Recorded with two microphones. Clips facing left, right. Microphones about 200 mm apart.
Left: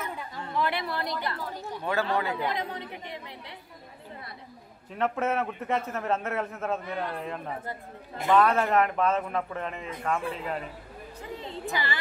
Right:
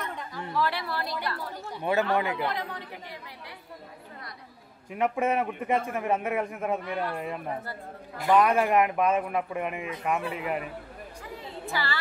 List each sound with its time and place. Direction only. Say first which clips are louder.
0.0 s chatter: even; 5° left (ahead or behind)
0.3 s chatter: even; 20° left (ahead or behind)
1.8 s a man's voice: right 3 dB; 15° right (ahead or behind)
2.4 s a woman's voice: left 1 dB; 20° left (ahead or behind)
4.9 s a man's voice: right 2 dB; 10° right (ahead or behind)
11.6 s a woman's voice: right 1 dB; 20° left (ahead or behind)